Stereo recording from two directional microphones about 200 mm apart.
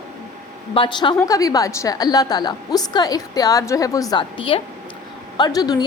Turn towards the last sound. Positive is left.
turn(degrees=20)  # may be behind; listen again after turning